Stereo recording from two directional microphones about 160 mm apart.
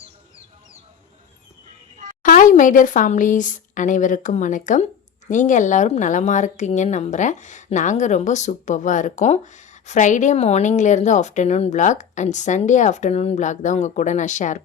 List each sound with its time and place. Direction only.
2.2 s a woman's voice: 55° left (ahead or behind)